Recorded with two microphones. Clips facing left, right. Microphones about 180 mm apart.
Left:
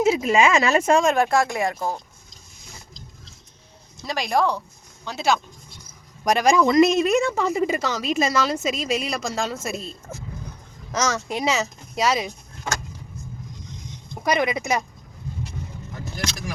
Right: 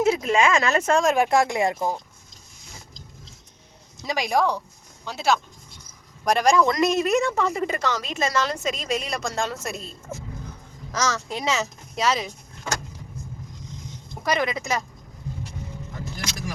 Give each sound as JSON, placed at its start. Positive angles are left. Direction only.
{"t": 0.0, "sound": "speech", "side_deg": 5}
{"t": 1.1, "sound": "speech", "side_deg": -15}
{"t": 4.0, "sound": "speech", "side_deg": -15}
{"t": 10.9, "sound": "speech", "side_deg": 20}
{"t": 14.3, "sound": "speech", "side_deg": 15}